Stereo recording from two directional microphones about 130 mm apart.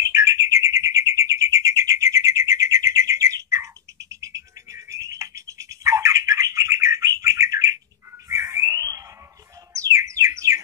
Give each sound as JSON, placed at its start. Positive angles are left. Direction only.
{"t": 0.1, "sound": "bird", "side_deg": -25}
{"t": 8.3, "sound": "a sound", "side_deg": -20}
{"t": 9.8, "sound": "music", "side_deg": -25}